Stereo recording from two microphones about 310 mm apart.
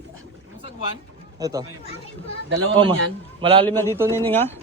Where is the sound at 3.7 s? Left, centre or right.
Centre.